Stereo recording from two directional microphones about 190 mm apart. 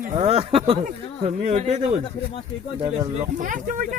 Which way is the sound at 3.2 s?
45° right (ahead or behind).